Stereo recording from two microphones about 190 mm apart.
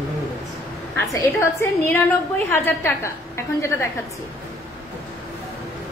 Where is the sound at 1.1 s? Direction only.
15° left (ahead or behind).